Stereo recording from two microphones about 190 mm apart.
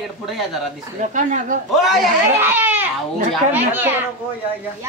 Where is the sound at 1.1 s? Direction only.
40° right (ahead or behind).